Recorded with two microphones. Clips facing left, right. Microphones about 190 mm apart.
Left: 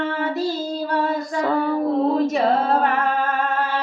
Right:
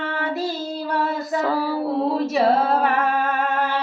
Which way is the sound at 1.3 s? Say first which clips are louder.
Left 1 dB; 5° right (ahead or behind).